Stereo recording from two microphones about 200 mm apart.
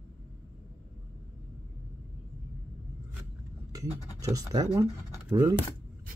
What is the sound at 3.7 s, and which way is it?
Speech, 15° right (ahead or behind).